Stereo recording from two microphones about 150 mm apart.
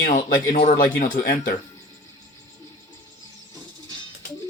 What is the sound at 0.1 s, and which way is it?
Speech, 60° left (ahead or behind).